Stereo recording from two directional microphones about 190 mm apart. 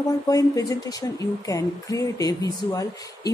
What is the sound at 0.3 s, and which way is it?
Speech, 20° left (ahead or behind).